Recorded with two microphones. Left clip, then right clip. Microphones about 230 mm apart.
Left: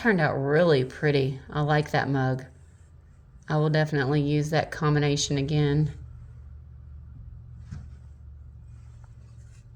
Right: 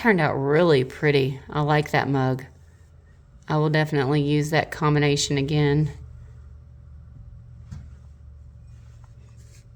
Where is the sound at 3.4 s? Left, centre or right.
Right.